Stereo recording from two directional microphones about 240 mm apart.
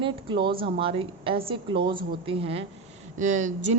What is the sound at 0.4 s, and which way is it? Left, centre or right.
A woman's voice, right.